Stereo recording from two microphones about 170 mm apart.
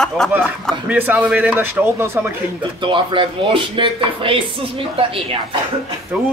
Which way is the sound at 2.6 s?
30° right (ahead or behind).